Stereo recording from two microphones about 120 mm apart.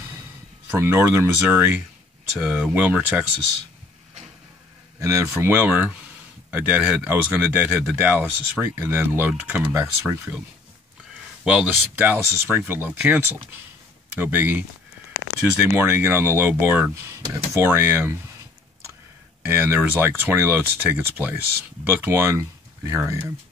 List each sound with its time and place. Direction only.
0.7 s speech: 20° right (ahead or behind)
5.0 s speech: 25° right (ahead or behind)
11.4 s speech: 10° right (ahead or behind)
15.7 s speech: 20° right (ahead or behind)
19.4 s speech: 20° right (ahead or behind)